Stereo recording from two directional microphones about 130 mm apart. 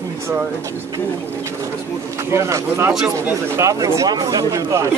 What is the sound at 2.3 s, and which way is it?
Speech, 20° right (ahead or behind).